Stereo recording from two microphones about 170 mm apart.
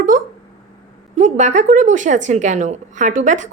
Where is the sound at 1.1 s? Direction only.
45° right (ahead or behind).